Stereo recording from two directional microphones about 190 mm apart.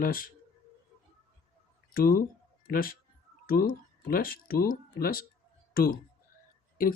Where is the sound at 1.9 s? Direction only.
50° left (ahead or behind).